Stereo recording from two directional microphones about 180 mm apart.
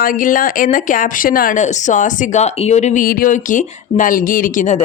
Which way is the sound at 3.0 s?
50° left (ahead or behind).